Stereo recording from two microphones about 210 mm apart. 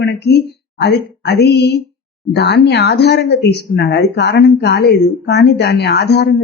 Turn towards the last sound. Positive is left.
turn(degrees=50)  # may be behind; listen again after turning